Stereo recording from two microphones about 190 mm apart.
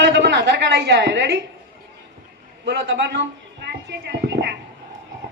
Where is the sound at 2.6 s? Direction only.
65° right (ahead or behind).